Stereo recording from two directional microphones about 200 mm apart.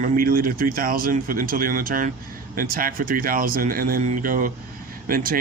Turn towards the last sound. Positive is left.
turn(degrees=-45)  # may be behind; listen again after turning